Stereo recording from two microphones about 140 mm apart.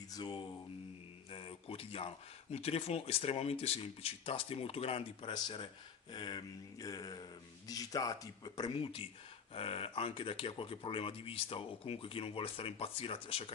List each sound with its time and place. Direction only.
0.1 s mantra: 30° left (ahead or behind)
1.3 s speech: 40° left (ahead or behind)
8.7 s speech: 40° left (ahead or behind)